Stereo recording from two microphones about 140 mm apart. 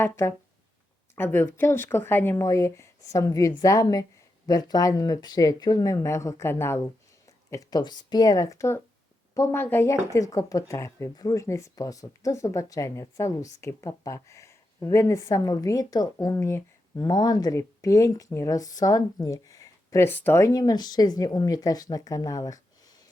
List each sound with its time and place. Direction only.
0.0 s speech: 15° left (ahead or behind)